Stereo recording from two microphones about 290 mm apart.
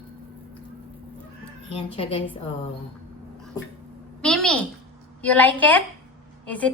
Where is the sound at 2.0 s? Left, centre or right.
Centre.